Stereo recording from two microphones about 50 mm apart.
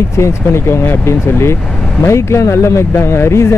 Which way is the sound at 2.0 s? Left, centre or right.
Left.